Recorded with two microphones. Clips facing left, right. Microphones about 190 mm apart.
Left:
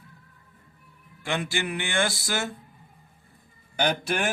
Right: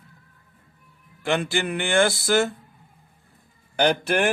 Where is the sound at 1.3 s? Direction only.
55° right (ahead or behind).